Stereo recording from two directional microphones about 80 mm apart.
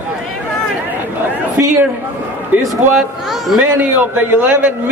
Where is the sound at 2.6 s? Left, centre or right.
Centre.